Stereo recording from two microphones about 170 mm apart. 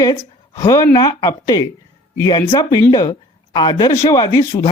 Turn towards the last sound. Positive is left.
turn(degrees=20)  # may be behind; listen again after turning